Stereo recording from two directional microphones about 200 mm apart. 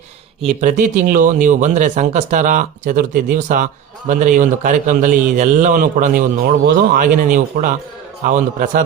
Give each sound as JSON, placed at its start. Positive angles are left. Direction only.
{"t": 0.6, "sound": "speech", "side_deg": -40}